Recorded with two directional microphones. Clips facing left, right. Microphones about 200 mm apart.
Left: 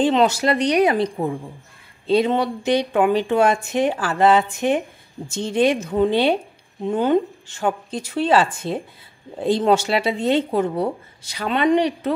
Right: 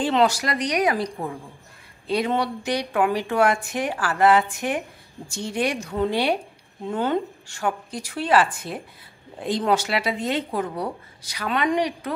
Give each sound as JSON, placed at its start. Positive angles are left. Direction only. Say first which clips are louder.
{"t": 0.0, "sound": "speech", "louder": "left 4 dB", "side_deg": 20}